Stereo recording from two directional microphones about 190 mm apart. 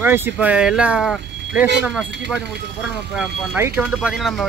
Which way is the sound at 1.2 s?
65° right (ahead or behind).